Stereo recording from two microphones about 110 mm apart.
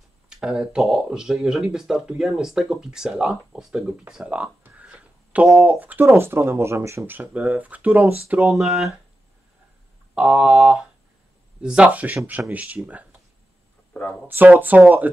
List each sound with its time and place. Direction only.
0.3 s speech: 5° right (ahead or behind)
4.1 s a sound: 5° right (ahead or behind)
5.7 s speech: 15° right (ahead or behind)
8.5 s speech: centre (ahead or behind)
10.1 s speech: 10° right (ahead or behind)
14.2 s speech: 15° right (ahead or behind)